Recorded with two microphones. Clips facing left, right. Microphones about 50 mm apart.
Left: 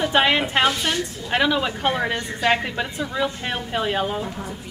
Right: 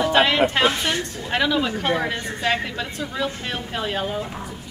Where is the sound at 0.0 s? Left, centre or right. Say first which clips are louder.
Even; centre.